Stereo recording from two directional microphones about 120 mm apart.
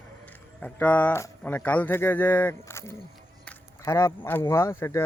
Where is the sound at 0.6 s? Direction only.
10° left (ahead or behind).